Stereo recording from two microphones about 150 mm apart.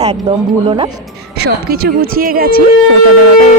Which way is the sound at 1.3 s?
90° right.